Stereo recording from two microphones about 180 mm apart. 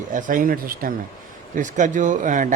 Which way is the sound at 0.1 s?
45° right (ahead or behind).